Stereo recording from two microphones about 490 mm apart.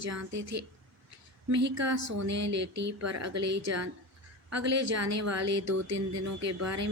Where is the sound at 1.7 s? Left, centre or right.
Right.